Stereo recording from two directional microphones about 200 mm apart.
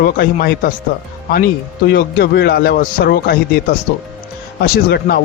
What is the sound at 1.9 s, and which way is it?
A man's voice, 50° left (ahead or behind).